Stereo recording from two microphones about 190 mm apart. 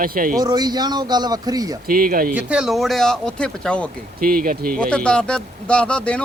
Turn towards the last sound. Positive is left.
turn(degrees=5)  # may be behind; listen again after turning